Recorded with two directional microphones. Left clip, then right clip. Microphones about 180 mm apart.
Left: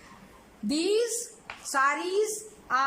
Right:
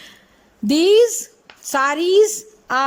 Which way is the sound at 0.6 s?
40° right (ahead or behind).